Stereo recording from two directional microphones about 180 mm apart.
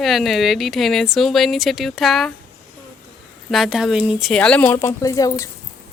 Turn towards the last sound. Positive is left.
turn(degrees=20)  # may be behind; listen again after turning